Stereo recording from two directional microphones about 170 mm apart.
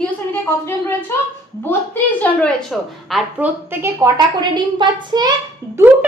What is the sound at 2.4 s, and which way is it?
A woman's voice, centre (ahead or behind).